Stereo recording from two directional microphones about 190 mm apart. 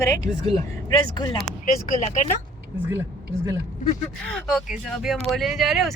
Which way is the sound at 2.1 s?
40° left (ahead or behind).